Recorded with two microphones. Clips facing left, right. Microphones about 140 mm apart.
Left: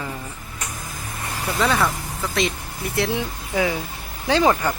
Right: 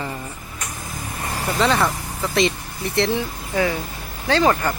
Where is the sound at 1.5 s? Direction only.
Centre (ahead or behind).